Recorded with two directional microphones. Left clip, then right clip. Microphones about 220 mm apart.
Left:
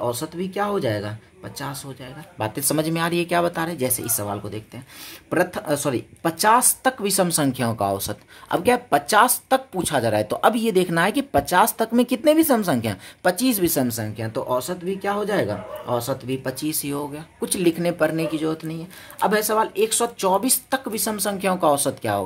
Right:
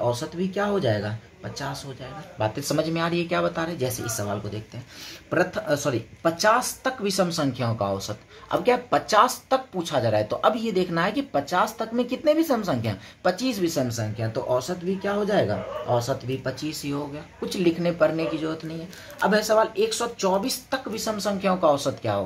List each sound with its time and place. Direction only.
0.0 s speech: 50° left (ahead or behind)
2.3 s speech: 50° left (ahead or behind)
5.3 s speech: 50° left (ahead or behind)